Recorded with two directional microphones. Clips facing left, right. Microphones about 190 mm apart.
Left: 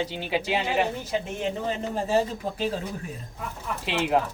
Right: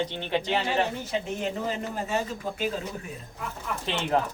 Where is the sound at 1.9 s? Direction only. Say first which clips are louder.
Left 5 dB; 30° left (ahead or behind).